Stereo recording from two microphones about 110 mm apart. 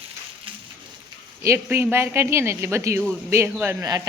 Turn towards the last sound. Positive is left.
turn(degrees=-35)  # may be behind; listen again after turning